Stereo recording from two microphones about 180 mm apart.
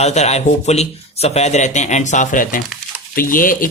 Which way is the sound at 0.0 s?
40° left (ahead or behind).